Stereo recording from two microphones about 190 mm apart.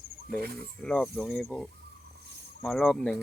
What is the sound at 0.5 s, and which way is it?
Speech, 5° left (ahead or behind).